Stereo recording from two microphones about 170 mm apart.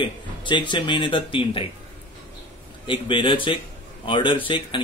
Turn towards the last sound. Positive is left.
turn(degrees=30)  # may be behind; listen again after turning